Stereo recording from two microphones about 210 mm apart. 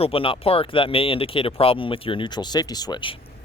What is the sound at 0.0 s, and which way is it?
Speech, 25° left (ahead or behind).